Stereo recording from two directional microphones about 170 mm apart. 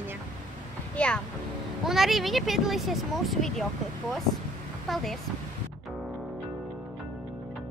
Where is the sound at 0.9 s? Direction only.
5° left (ahead or behind).